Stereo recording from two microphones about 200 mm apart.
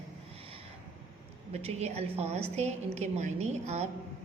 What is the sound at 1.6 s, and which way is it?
A woman's voice, 30° right (ahead or behind).